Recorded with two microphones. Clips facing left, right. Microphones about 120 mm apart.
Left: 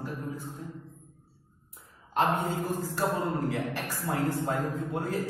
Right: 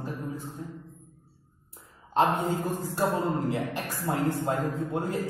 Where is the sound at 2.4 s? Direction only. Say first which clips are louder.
Right 2 dB; 20° right (ahead or behind).